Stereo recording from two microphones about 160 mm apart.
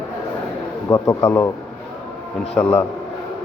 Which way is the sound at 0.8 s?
20° left (ahead or behind).